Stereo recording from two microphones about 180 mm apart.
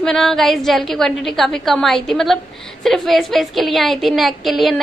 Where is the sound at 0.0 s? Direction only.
Centre (ahead or behind).